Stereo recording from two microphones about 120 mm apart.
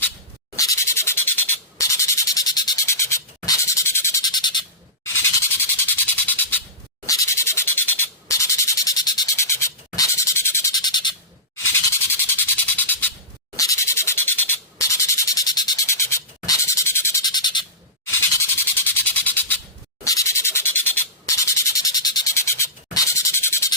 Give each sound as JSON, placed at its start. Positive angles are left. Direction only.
{"t": 0.5, "sound": "insect", "side_deg": 25}
{"t": 4.2, "sound": "bird", "side_deg": 35}
{"t": 5.0, "sound": "squeal", "side_deg": 20}
{"t": 5.9, "sound": "a sound", "side_deg": 15}
{"t": 7.0, "sound": "insect", "side_deg": 25}
{"t": 10.7, "sound": "bird", "side_deg": 35}
{"t": 11.5, "sound": "a sound", "side_deg": 20}
{"t": 13.6, "sound": "insect", "side_deg": 25}
{"t": 17.2, "sound": "bird", "side_deg": 35}
{"t": 18.9, "sound": "a sound", "side_deg": 15}
{"t": 20.1, "sound": "insect", "side_deg": 25}